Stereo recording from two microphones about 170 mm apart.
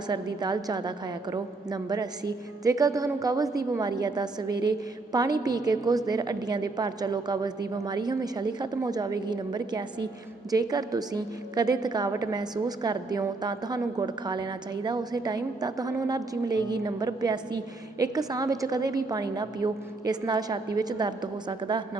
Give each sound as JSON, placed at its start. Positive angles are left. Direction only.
{"t": 0.3, "sound": "a woman's voice", "side_deg": -25}